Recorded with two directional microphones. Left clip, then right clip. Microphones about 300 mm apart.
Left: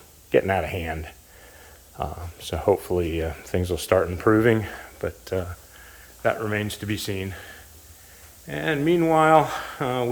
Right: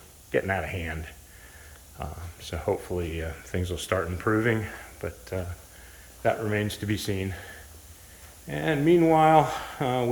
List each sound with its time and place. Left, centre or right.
0.3 s speech: left
6.2 s speech: centre